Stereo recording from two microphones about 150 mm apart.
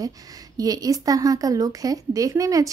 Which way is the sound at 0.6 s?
25° right (ahead or behind).